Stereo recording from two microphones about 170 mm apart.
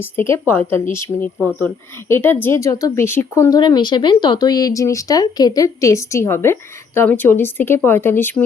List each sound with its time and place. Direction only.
0.0 s a woman's voice: 15° left (ahead or behind)